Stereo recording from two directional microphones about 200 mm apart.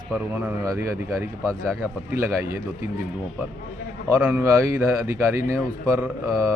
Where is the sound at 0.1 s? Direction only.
10° right (ahead or behind).